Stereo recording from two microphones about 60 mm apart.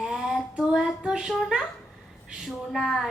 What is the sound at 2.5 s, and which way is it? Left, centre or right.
Speech, centre.